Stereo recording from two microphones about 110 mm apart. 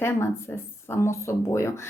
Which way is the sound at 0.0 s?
20° left (ahead or behind).